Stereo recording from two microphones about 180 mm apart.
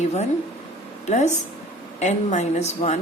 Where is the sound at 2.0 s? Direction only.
40° left (ahead or behind).